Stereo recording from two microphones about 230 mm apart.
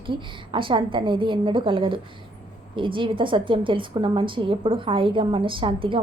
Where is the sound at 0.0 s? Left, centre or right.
Right.